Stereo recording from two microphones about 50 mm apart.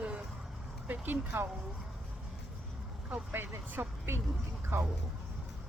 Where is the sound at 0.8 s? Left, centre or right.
Right.